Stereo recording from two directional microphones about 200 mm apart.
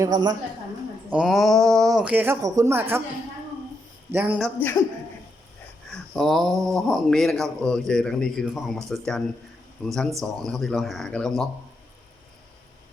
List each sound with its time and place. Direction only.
0.0 s a woman's voice: 20° right (ahead or behind)
1.1 s a man's voice: 5° right (ahead or behind)
4.1 s speech: 10° right (ahead or behind)
5.9 s a sound: centre (ahead or behind)
6.7 s a man's voice: centre (ahead or behind)